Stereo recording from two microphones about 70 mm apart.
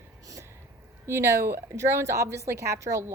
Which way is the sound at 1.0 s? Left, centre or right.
Right.